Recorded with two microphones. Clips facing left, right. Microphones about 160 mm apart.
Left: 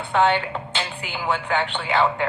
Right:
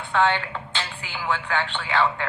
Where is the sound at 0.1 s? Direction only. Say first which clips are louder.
Left 2 dB; 20° left (ahead or behind).